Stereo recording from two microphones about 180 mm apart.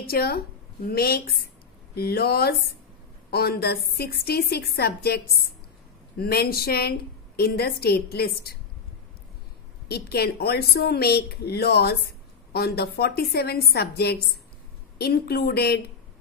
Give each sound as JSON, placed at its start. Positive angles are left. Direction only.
{"t": 0.0, "sound": "a woman's voice", "side_deg": 55}
{"t": 9.8, "sound": "a woman's voice", "side_deg": 60}